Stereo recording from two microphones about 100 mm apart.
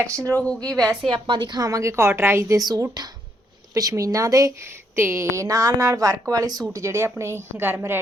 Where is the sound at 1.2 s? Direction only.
50° right (ahead or behind); by 2.6 s 25° right (ahead or behind).